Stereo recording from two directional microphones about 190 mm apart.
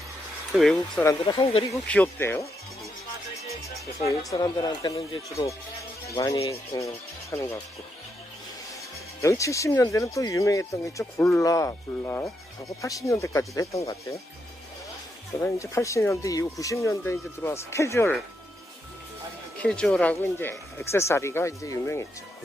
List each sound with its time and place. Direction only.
0.5 s speech: centre (ahead or behind)
1.2 s speech: 30° left (ahead or behind)
1.7 s speech: 10° left (ahead or behind)
4.4 s speech: 20° left (ahead or behind)
6.1 s speech: 15° left (ahead or behind)
9.2 s speech: 15° left (ahead or behind)
15.3 s speech: 15° left (ahead or behind)
19.6 s speech: 5° left (ahead or behind)